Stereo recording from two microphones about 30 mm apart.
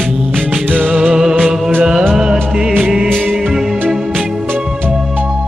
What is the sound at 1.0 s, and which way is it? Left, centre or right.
Music, centre.